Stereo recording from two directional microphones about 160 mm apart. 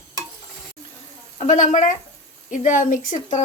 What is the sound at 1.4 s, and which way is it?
A woman's voice, 45° left (ahead or behind).